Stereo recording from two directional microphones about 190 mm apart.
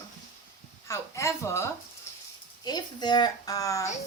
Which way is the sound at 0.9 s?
15° left (ahead or behind).